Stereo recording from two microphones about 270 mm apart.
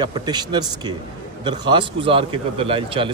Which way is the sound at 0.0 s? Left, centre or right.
Centre.